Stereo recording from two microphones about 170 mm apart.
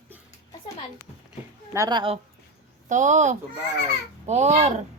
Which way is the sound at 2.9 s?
45° right (ahead or behind).